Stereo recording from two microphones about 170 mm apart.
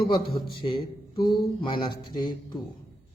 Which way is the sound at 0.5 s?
30° left (ahead or behind).